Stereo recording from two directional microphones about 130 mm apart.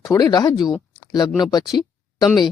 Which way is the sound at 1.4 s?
30° left (ahead or behind).